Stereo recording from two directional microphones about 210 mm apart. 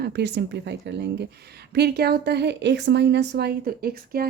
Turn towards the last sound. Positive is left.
turn(degrees=-45)  # may be behind; listen again after turning